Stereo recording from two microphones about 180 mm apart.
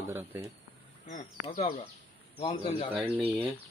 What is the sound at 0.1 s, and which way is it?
Speech, 10° right (ahead or behind).